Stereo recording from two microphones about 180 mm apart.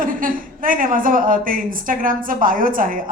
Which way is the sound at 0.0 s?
50° right (ahead or behind).